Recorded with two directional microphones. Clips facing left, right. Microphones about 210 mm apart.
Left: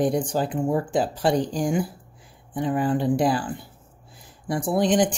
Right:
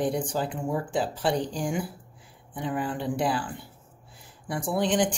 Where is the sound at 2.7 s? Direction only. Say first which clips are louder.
Left 7 dB; 40° left (ahead or behind).